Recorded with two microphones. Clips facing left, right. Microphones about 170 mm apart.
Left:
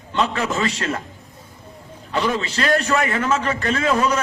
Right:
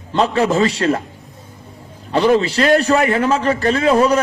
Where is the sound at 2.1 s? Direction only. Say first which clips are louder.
Right 8 dB; 35° right (ahead or behind).